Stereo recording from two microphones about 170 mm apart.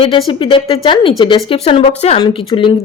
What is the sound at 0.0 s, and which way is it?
A woman's voice, 30° left (ahead or behind).